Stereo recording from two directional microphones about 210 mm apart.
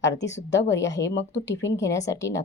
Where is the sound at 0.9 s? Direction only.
55° left (ahead or behind).